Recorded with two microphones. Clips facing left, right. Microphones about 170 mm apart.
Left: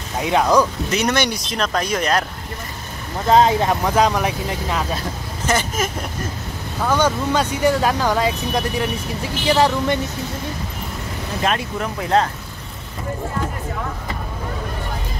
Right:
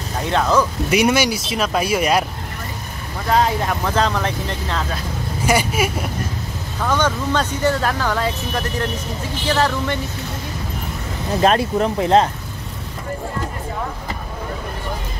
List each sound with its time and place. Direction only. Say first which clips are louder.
0.2 s speech: left 2 dB; 15° left (ahead or behind)
0.8 s speech: right 3 dB; 10° right (ahead or behind)
3.3 s speech: left 4 dB; 20° left (ahead or behind)
5.4 s speech: right 3 dB; 10° right (ahead or behind)
6.8 s speech: left 1 dB; 10° left (ahead or behind)
11.4 s speech: right 6 dB; 35° right (ahead or behind)